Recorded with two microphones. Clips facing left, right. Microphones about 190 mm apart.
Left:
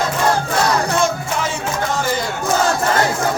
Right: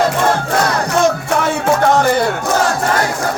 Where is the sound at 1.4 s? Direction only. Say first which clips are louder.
Right 9 dB; 65° right (ahead or behind).